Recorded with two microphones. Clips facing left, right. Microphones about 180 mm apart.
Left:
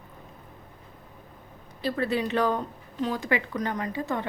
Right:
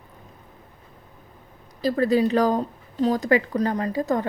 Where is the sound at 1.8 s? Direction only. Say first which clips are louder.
Right 7 dB; 40° right (ahead or behind).